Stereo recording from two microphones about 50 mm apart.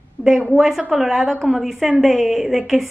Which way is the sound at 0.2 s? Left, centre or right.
Left.